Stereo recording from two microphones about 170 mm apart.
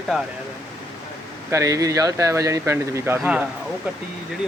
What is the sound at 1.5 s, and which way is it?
Speech, 20° right (ahead or behind).